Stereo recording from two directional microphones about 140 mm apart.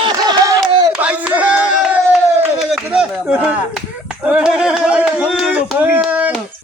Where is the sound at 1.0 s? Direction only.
10° right (ahead or behind).